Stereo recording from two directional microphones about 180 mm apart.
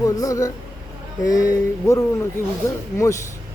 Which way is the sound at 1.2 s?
20° left (ahead or behind).